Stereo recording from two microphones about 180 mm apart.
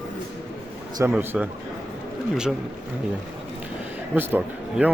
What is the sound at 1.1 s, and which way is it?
Speech, 10° right (ahead or behind).